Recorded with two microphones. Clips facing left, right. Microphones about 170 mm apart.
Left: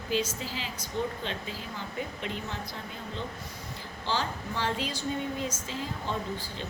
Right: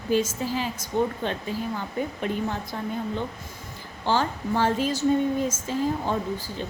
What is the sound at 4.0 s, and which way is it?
A woman's voice, 50° right (ahead or behind).